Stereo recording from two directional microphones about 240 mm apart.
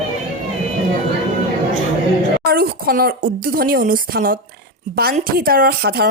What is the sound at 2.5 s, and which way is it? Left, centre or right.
A woman's voice, right.